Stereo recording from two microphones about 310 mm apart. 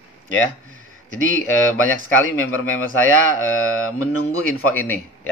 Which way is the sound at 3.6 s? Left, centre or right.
Left.